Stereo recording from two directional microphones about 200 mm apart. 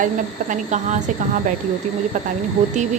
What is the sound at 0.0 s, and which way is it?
Speech, 40° right (ahead or behind).